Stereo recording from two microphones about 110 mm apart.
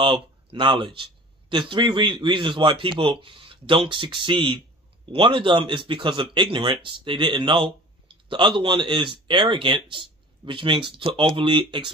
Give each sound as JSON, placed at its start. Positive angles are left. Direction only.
{"t": 0.0, "sound": "speech", "side_deg": -50}